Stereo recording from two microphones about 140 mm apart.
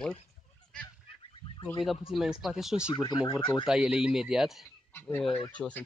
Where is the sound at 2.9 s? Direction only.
30° left (ahead or behind).